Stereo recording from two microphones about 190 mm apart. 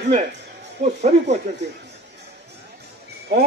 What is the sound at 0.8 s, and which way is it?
Speech, 35° right (ahead or behind).